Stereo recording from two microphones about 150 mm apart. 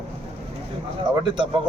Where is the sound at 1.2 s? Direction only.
30° right (ahead or behind).